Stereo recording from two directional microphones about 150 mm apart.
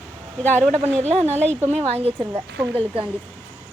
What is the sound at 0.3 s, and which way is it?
Speech, 10° left (ahead or behind).